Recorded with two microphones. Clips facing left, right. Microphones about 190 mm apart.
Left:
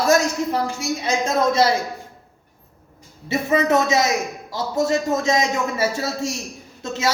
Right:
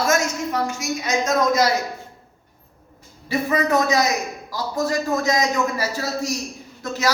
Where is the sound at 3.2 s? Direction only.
25° left (ahead or behind).